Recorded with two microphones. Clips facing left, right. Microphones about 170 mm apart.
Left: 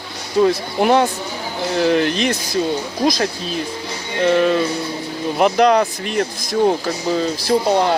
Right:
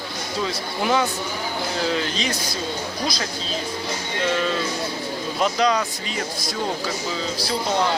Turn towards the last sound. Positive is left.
turn(degrees=50)  # may be behind; listen again after turning